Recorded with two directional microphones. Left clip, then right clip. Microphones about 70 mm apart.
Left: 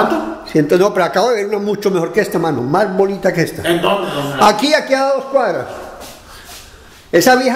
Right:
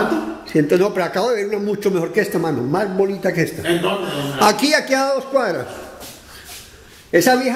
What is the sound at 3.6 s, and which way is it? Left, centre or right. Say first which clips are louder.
Speech: left 5 dB; left.